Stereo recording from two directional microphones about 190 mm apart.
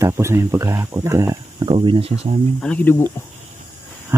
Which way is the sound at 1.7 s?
30° right (ahead or behind).